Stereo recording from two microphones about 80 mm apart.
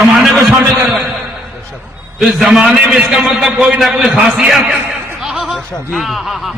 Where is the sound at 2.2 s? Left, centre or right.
Centre.